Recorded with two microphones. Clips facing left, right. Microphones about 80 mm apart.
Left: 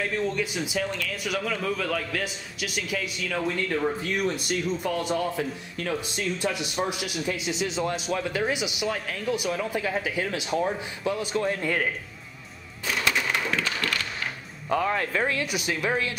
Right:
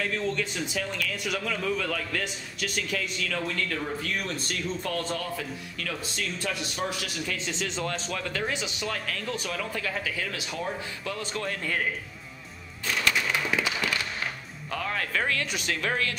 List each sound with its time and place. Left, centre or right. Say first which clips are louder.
0.0 s a man's voice: left 2 dB; centre
5.4 s speech: left 5 dB; left
5.9 s a man's voice: left 4 dB; centre
12.8 s a sound: left 1 dB; centre
13.5 s a sound: even; centre
14.7 s speech: left 6 dB; centre
15.4 s a man's voice: left 3 dB; centre